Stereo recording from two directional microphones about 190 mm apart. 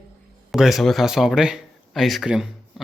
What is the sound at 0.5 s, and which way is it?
Speech, centre (ahead or behind).